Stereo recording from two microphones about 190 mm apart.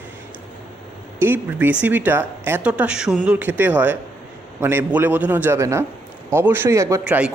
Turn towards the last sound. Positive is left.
turn(degrees=-5)  # may be behind; listen again after turning